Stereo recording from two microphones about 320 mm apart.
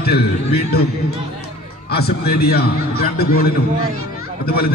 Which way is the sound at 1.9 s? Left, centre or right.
Left.